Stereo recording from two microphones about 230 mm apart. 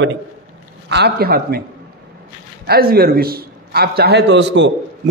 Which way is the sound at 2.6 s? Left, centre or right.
Right.